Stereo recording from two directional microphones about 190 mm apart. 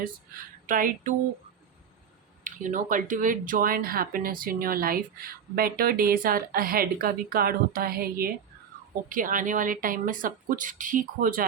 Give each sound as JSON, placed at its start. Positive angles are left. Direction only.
{"t": 0.7, "sound": "speech", "side_deg": -45}
{"t": 2.4, "sound": "speech", "side_deg": -45}